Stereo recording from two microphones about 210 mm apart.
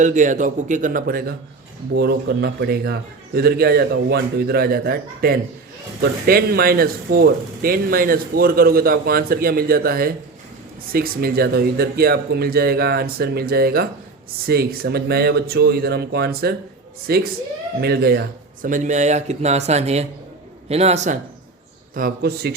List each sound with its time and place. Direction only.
0.0 s speech: 35° right (ahead or behind)
21.9 s speech: 45° right (ahead or behind)